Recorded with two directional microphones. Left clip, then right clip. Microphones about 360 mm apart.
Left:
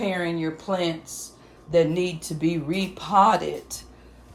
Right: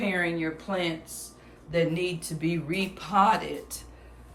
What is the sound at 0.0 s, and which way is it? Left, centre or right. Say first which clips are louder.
Speech: left 2 dB; centre.